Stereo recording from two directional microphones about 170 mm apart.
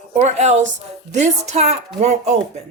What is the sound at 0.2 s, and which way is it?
A woman's voice, 40° right (ahead or behind).